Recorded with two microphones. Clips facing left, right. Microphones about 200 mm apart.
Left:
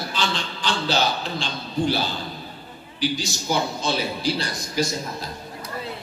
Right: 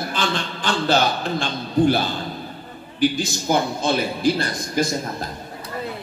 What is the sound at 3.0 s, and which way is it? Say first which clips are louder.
A man's voice: right 5 dB; 55° right (ahead or behind).